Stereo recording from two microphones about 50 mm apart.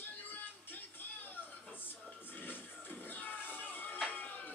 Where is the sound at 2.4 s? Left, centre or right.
Left.